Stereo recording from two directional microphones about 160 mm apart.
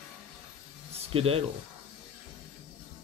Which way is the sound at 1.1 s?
35° right (ahead or behind).